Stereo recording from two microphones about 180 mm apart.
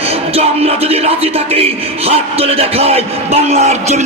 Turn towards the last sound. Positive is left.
turn(degrees=-40)  # may be behind; listen again after turning